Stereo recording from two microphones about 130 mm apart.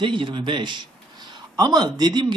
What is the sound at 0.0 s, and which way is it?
A man's voice, 40° right (ahead or behind).